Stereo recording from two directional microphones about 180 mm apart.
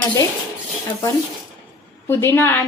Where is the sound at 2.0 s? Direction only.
15° left (ahead or behind).